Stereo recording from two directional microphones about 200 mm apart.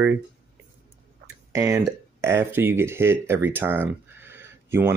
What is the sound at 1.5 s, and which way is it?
Speech, 15° right (ahead or behind).